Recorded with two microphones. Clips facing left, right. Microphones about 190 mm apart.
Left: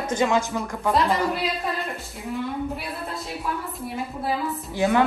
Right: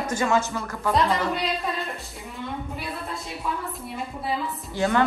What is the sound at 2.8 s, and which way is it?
Music, centre (ahead or behind).